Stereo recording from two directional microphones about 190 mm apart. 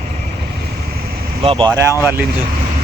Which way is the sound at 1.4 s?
30° right (ahead or behind).